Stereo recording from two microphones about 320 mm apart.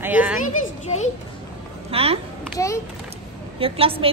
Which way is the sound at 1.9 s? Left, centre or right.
Centre.